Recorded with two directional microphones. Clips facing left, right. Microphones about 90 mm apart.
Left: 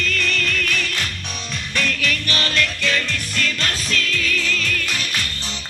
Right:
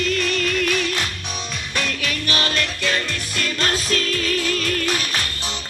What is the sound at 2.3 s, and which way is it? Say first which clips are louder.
Music: right 2 dB; 35° right (ahead or behind).